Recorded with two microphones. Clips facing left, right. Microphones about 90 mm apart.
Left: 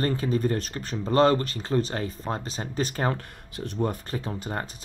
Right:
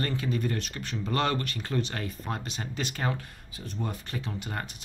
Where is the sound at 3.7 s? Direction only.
45° left (ahead or behind).